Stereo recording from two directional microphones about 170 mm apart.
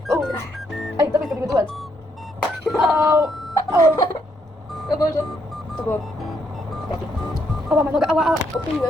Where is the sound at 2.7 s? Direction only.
Centre (ahead or behind).